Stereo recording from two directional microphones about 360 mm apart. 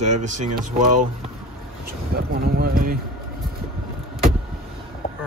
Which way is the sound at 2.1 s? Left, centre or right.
Right.